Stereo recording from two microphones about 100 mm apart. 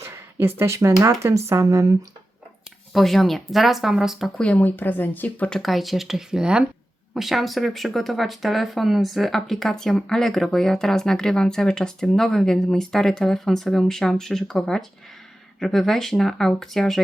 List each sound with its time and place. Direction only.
0.0 s speech: 25° right (ahead or behind)
2.9 s speech: centre (ahead or behind)
4.4 s speech: 10° left (ahead or behind)
5.5 s speech: centre (ahead or behind)